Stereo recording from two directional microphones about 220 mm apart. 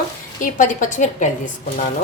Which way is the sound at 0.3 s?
35° left (ahead or behind).